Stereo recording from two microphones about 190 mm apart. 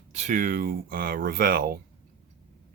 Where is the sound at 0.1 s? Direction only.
40° right (ahead or behind).